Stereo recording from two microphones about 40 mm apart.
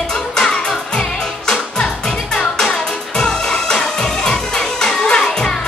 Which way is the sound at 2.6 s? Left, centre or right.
Centre.